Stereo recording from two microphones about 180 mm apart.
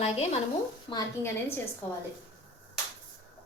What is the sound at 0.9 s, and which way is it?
Speech, 25° left (ahead or behind).